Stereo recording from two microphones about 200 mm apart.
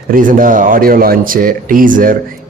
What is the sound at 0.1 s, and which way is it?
A man's voice, 40° right (ahead or behind).